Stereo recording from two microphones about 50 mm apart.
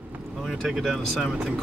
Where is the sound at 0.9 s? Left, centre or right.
Centre.